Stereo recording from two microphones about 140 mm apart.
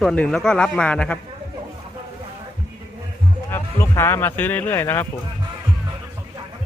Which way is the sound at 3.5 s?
15° left (ahead or behind).